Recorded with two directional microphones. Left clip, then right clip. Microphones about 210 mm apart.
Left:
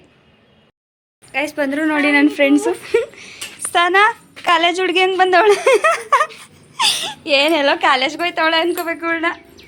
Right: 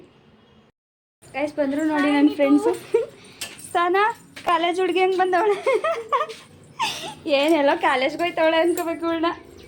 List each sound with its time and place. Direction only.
1.3 s speech: 5° left (ahead or behind)
5.4 s speech: 20° left (ahead or behind)
6.7 s speech: centre (ahead or behind)